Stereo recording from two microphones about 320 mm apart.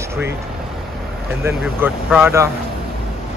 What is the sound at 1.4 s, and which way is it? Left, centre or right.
Speech, centre.